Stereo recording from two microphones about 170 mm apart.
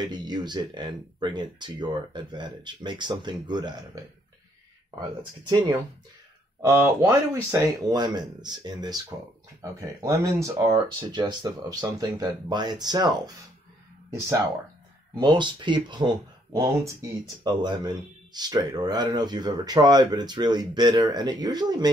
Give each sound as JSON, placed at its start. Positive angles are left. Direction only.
{"t": 0.0, "sound": "speech", "side_deg": -25}
{"t": 6.6, "sound": "speech", "side_deg": -20}
{"t": 15.1, "sound": "speech", "side_deg": -25}